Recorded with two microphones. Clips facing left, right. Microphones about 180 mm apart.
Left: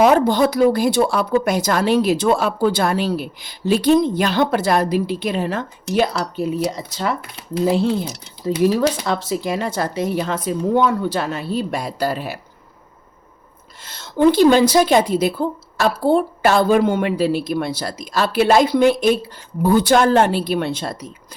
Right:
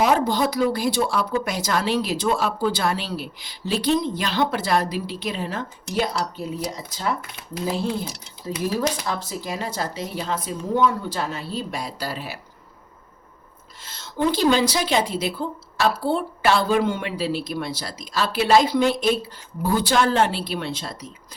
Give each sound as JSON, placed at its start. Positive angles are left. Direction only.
{"t": 0.0, "sound": "a woman's voice", "side_deg": 60}
{"t": 9.0, "sound": "speech", "side_deg": 75}
{"t": 13.8, "sound": "a woman's voice", "side_deg": 60}